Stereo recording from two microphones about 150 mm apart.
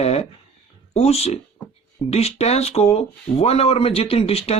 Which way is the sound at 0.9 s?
45° left (ahead or behind).